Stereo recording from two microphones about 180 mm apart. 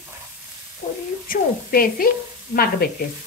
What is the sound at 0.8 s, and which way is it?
Speech, 45° left (ahead or behind).